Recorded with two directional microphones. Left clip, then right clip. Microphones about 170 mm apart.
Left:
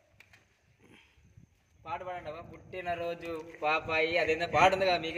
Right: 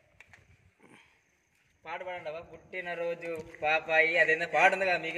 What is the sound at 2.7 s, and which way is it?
A man's voice, 40° left (ahead or behind).